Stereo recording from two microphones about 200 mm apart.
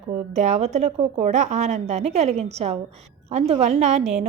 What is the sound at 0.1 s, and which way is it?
A woman's voice, 35° right (ahead or behind).